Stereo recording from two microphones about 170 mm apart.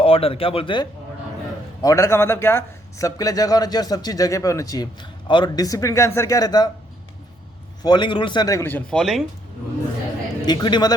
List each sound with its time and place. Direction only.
0.0 s speech: 35° left (ahead or behind)
1.8 s speech: 20° left (ahead or behind)
7.8 s speech: 25° left (ahead or behind); by 9.2 s centre (ahead or behind)
10.4 s speech: 25° left (ahead or behind)